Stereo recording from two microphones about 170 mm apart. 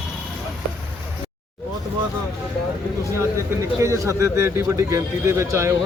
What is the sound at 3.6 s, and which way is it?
A man's voice, 15° right (ahead or behind).